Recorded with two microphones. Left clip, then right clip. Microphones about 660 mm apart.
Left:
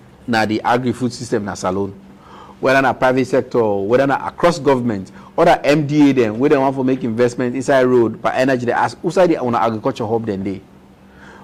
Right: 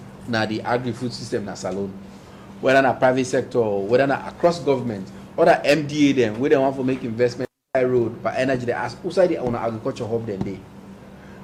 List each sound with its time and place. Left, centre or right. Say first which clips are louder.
0.3 s a man's voice: left 7 dB; left
2.6 s a man's voice: left 3 dB; left